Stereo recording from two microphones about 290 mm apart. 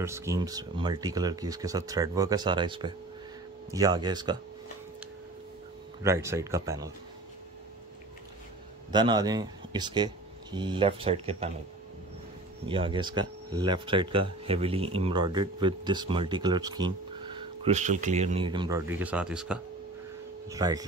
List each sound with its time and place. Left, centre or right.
0.0 s speech: centre
6.0 s speech: centre
8.9 s speech: centre
12.6 s speech: centre